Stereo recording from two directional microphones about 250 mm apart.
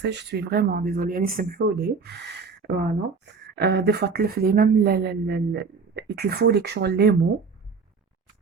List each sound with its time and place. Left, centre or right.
0.0 s speech: right